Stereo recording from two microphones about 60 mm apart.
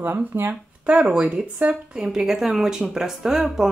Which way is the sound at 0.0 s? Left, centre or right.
Right.